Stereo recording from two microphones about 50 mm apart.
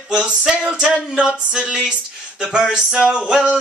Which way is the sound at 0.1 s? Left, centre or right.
Centre.